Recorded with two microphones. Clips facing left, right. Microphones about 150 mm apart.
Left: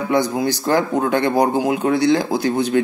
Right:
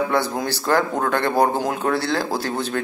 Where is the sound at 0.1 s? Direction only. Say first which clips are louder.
Left 4 dB; 10° left (ahead or behind).